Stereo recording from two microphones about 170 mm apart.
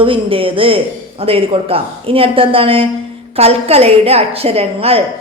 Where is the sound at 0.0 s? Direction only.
30° right (ahead or behind).